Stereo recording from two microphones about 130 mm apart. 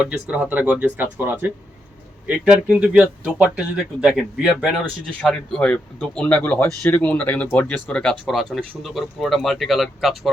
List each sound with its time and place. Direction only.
0.0 s speech: 10° right (ahead or behind)
5.2 s speech: 10° left (ahead or behind)